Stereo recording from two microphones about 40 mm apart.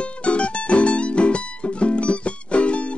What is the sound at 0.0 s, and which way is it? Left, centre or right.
Music, left.